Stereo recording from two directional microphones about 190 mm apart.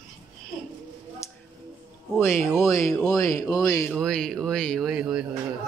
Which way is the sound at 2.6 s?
15° left (ahead or behind).